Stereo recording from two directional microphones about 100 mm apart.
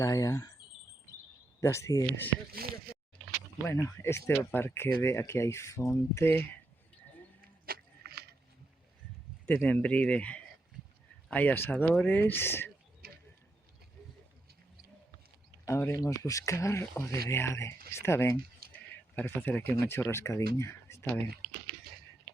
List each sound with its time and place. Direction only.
0.0 s speech: 35° left (ahead or behind)
1.6 s speech: 30° left (ahead or behind)
3.7 s speech: 25° left (ahead or behind)
9.5 s speech: 15° left (ahead or behind)
15.6 s speech: 30° left (ahead or behind)